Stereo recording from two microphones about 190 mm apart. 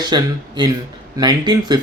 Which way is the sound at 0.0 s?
20° right (ahead or behind).